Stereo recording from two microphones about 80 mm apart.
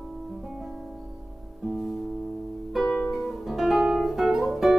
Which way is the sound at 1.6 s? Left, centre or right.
Centre.